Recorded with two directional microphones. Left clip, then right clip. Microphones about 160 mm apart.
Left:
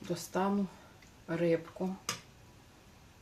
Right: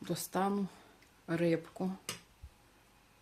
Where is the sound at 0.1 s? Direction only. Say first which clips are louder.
Left 1 dB; 90° right.